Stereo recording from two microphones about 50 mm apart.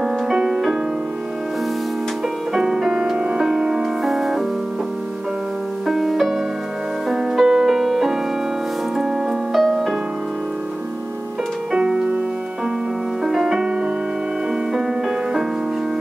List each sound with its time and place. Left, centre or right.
0.0 s music: centre
2.5 s music: centre
5.9 s music: centre
11.7 s music: centre
13.2 s music: centre